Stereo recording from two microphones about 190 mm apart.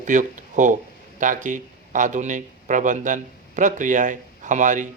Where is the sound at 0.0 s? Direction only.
40° right (ahead or behind).